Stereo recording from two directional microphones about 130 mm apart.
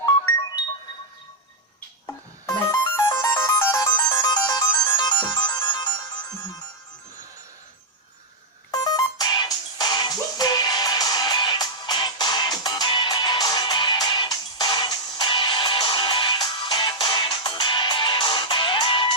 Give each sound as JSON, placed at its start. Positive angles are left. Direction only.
{"t": 2.0, "sound": "music", "side_deg": 35}
{"t": 3.3, "sound": "ringtone", "side_deg": 20}
{"t": 8.7, "sound": "music", "side_deg": 35}